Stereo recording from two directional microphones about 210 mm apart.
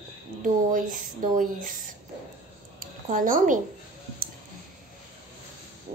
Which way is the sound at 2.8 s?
40° right (ahead or behind).